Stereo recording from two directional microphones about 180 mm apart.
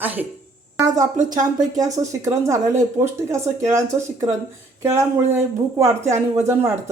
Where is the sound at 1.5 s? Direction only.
20° right (ahead or behind).